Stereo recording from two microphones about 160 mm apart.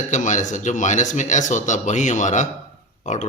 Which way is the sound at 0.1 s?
50° left (ahead or behind).